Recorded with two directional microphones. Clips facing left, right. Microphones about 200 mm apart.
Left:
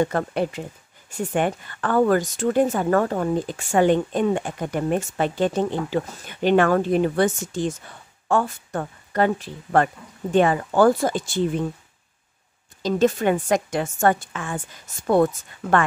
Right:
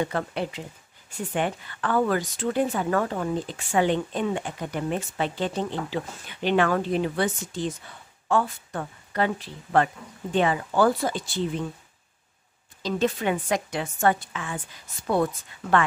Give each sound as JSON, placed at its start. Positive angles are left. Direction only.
{"t": 0.0, "sound": "a woman's voice", "side_deg": 45}
{"t": 12.8, "sound": "a woman's voice", "side_deg": 45}